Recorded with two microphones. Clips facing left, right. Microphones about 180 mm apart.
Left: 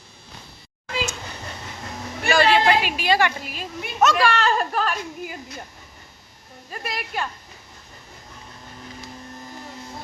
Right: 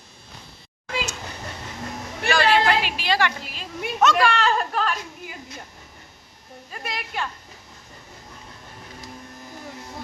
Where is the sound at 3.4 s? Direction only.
50° left (ahead or behind).